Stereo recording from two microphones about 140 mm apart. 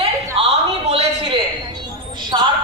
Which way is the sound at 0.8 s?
45° right (ahead or behind).